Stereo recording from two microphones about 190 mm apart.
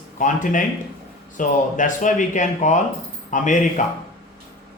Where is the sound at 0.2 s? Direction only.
45° left (ahead or behind).